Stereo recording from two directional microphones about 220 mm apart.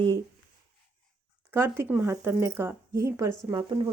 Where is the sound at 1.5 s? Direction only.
10° right (ahead or behind).